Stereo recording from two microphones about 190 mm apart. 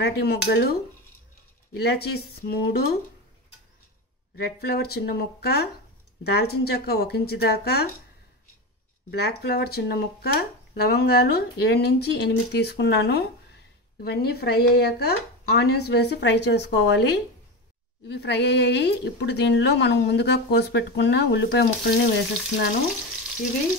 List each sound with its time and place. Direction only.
0.0 s a woman's voice: 55° left (ahead or behind)
4.4 s a woman's voice: 55° left (ahead or behind)
9.1 s a woman's voice: 60° left (ahead or behind)